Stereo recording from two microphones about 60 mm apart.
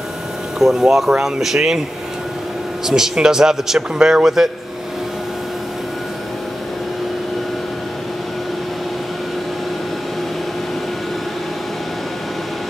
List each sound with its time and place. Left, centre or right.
0.6 s speech: centre
2.9 s a man's voice: centre